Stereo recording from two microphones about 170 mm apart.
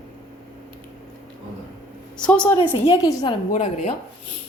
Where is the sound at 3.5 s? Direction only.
45° left (ahead or behind).